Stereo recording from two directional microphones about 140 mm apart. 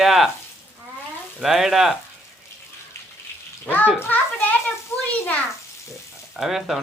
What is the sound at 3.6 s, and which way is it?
Bathtub, 10° left (ahead or behind).